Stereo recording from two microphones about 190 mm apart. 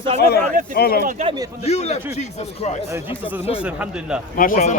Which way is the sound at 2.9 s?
10° right (ahead or behind).